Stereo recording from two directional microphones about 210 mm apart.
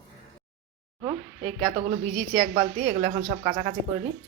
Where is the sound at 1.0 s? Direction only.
25° right (ahead or behind).